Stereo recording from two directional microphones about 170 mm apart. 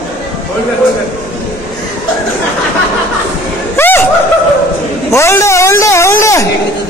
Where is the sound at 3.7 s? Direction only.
15° left (ahead or behind).